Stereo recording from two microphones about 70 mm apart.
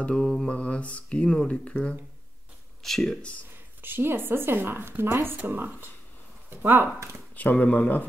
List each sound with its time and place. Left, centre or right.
0.0 s speech: centre
2.8 s speech: centre
3.8 s a woman's voice: right
7.3 s speech: left